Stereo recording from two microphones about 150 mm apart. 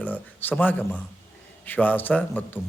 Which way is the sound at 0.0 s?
10° left (ahead or behind).